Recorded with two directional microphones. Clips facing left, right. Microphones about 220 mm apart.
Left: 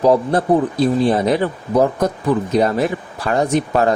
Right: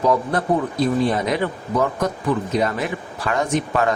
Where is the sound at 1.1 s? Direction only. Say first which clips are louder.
Left 5 dB; 30° left (ahead or behind).